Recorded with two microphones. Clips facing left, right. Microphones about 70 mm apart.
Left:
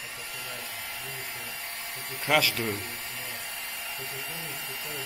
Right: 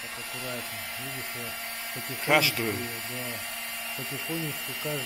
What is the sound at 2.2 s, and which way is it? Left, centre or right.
Speech, centre.